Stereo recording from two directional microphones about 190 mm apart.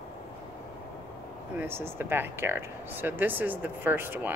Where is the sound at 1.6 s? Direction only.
10° right (ahead or behind).